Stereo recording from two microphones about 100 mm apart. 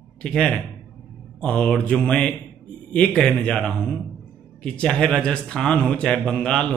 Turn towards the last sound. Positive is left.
turn(degrees=10)  # may be behind; listen again after turning